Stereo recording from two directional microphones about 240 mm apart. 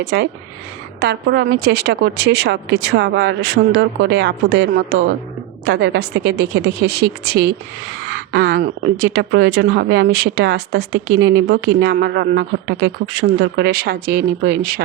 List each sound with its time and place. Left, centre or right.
0.0 s a woman's voice: right